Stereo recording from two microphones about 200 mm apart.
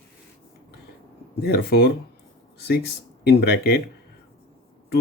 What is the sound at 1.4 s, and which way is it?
Speech, 50° left (ahead or behind).